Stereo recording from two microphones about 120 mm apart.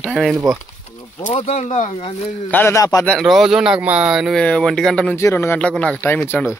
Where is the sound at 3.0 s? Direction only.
5° left (ahead or behind).